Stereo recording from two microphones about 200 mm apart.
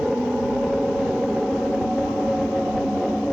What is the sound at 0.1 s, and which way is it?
Vehicle, centre (ahead or behind).